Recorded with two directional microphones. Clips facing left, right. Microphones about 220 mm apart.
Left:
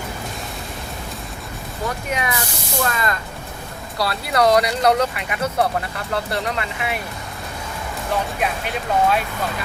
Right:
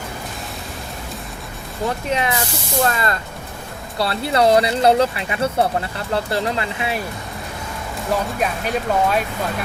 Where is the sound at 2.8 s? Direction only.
30° right (ahead or behind).